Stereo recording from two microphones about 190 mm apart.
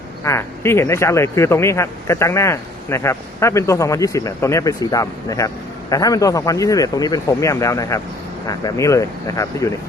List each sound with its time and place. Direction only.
0.3 s speech: 15° left (ahead or behind)